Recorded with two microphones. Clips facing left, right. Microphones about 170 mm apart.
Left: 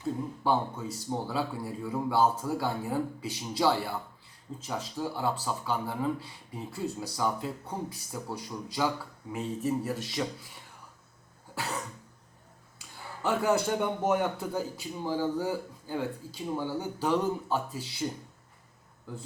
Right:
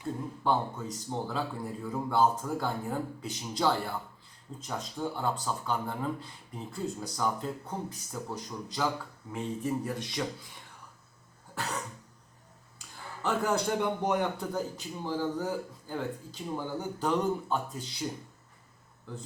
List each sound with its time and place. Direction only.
0.4 s speech: 10° left (ahead or behind)
11.5 s cough: 10° left (ahead or behind)
13.2 s speech: 5° left (ahead or behind)